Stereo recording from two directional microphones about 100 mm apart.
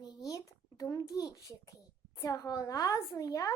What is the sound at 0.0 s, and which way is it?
A child's voice, 40° left (ahead or behind).